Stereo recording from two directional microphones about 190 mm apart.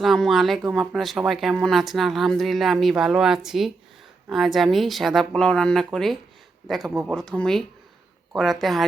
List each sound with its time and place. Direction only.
0.0 s speech: centre (ahead or behind)